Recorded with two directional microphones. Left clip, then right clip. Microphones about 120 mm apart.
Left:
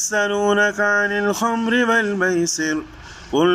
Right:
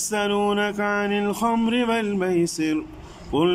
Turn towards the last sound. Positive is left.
turn(degrees=-5)  # may be behind; listen again after turning